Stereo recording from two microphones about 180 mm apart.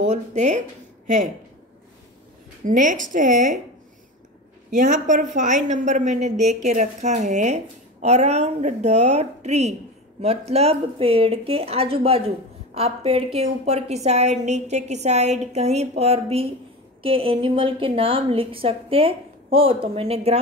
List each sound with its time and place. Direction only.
0.0 s speech: 40° right (ahead or behind)
2.6 s a woman's voice: 45° right (ahead or behind)
4.6 s a woman's voice: 45° right (ahead or behind)